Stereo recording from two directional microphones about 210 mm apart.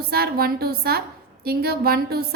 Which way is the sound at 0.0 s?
45° right (ahead or behind).